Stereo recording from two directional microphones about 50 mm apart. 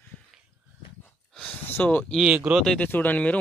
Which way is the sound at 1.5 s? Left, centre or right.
Left.